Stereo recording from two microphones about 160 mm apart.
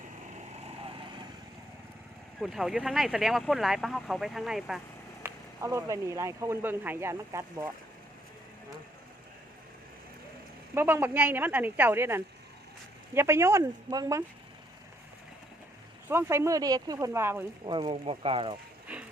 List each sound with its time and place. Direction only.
0.8 s vehicle: 35° right (ahead or behind)
2.4 s speech: centre (ahead or behind)
5.2 s speech: 15° right (ahead or behind)
10.8 s speech: 15° right (ahead or behind)
16.0 s speech: 15° right (ahead or behind)
17.7 s speech: 30° right (ahead or behind)
18.9 s a sound: 10° right (ahead or behind)